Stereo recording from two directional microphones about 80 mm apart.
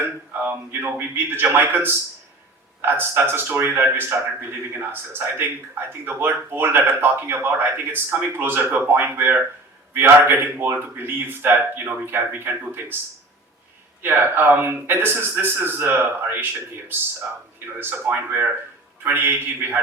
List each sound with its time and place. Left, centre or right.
0.0 s a man's voice: right
14.0 s a man's voice: right
17.7 s a man's voice: right